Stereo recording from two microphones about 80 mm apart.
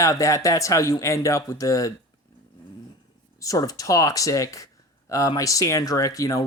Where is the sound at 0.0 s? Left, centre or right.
Left.